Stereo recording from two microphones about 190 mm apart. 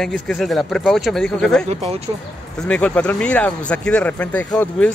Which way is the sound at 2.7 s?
5° left (ahead or behind).